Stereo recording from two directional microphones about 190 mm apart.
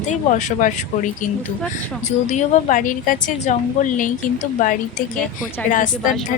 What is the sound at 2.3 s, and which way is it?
A woman's voice, 40° left (ahead or behind).